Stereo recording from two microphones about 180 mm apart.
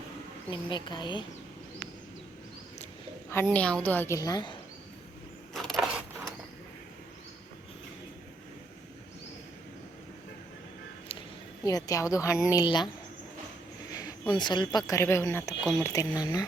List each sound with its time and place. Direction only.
0.5 s speech: 25° left (ahead or behind)
3.2 s a woman's voice: 10° left (ahead or behind)
5.5 s mechanisms: centre (ahead or behind)
11.6 s speech: 20° left (ahead or behind)
13.9 s speech: 25° left (ahead or behind)